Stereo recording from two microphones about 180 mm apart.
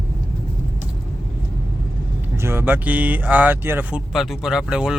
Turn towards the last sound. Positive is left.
turn(degrees=-5)  # may be behind; listen again after turning